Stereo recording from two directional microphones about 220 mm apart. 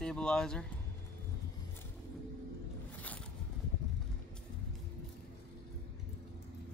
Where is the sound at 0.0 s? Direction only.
5° left (ahead or behind).